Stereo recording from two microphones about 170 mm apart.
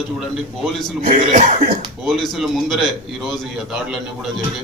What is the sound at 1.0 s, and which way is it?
Speech, 50° right (ahead or behind).